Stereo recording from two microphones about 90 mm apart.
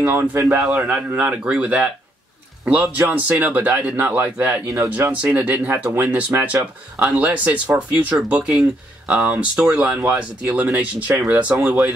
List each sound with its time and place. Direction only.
0.0 s a man's voice: 20° right (ahead or behind)
0.8 s a man's voice: 15° right (ahead or behind)